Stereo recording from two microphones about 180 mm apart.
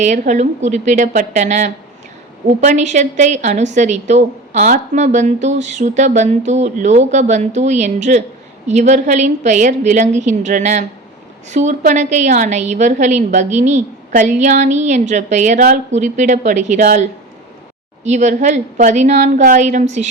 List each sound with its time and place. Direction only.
0.0 s a woman's voice: 40° right (ahead or behind)